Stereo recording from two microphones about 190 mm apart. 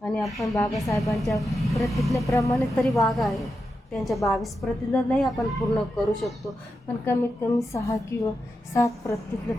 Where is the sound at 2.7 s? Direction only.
Centre (ahead or behind).